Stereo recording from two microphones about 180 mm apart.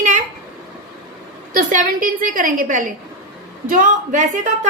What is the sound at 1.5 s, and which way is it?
A woman's voice, 45° right (ahead or behind).